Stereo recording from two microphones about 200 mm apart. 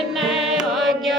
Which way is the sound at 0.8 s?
Centre (ahead or behind).